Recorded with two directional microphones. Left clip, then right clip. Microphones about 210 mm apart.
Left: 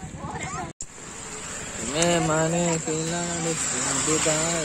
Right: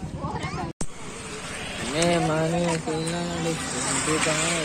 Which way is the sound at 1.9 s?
20° left (ahead or behind).